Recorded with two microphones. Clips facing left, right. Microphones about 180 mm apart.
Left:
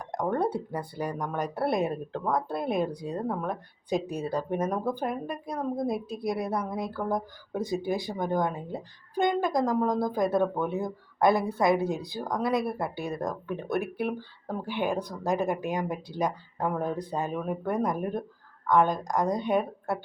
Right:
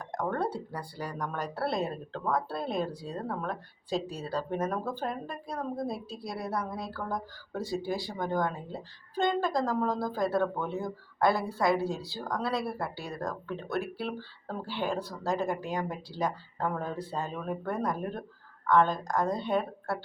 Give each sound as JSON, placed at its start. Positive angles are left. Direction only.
{"t": 0.0, "sound": "speech", "side_deg": 15}